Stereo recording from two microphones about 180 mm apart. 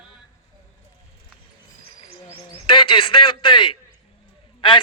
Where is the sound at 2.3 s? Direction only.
30° left (ahead or behind).